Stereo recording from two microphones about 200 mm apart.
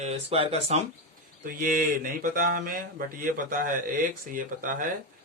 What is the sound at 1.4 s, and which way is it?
Speech, 45° right (ahead or behind).